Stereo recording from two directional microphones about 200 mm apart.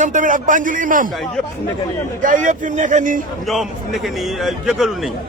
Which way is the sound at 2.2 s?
40° right (ahead or behind).